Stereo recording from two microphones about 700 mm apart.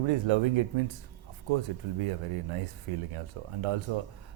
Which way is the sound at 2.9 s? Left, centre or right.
Right.